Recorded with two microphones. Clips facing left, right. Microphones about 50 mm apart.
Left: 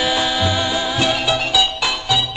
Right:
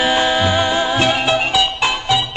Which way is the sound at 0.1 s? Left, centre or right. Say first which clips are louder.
Right 4 dB; right.